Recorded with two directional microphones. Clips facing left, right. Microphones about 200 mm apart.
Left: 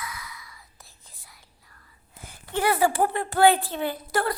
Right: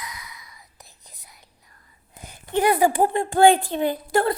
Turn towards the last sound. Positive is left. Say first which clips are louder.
# right 5 dB
turn(degrees=-20)  # may be behind; listen again after turning